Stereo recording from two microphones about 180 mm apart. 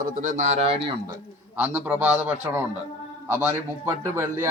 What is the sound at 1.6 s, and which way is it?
Speech, 10° right (ahead or behind).